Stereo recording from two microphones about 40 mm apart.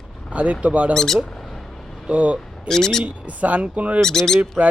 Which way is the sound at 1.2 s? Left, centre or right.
Centre.